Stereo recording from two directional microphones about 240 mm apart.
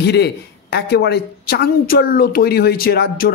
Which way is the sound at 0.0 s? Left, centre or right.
Left.